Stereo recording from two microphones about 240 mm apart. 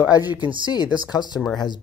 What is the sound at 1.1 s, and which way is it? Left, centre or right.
Speech, centre.